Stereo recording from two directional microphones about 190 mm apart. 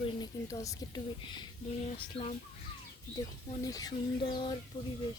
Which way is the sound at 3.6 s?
20° left (ahead or behind).